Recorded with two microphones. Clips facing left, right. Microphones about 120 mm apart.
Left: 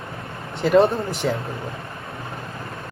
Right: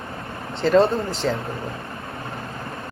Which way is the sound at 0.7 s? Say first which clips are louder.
Left 1 dB; 20° left (ahead or behind).